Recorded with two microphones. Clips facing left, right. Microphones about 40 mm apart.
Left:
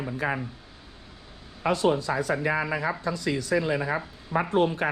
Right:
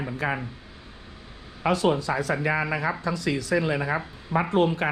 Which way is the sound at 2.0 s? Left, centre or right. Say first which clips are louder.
Right 1 dB; right.